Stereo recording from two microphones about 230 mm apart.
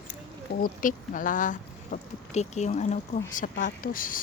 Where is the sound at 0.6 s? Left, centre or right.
Left.